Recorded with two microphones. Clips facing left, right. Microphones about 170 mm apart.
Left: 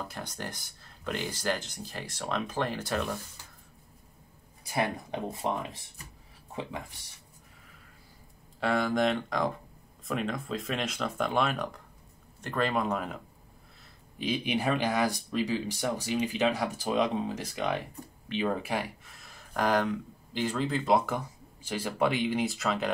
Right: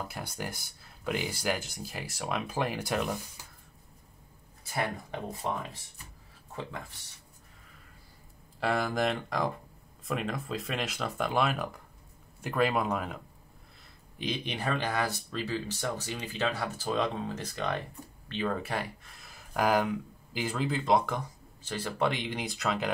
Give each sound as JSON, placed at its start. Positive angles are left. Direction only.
{"t": 0.1, "sound": "speech", "side_deg": -10}
{"t": 4.6, "sound": "speech", "side_deg": 15}
{"t": 8.5, "sound": "speech", "side_deg": 0}